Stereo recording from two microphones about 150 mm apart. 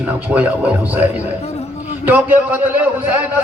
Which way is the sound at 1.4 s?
45° left (ahead or behind).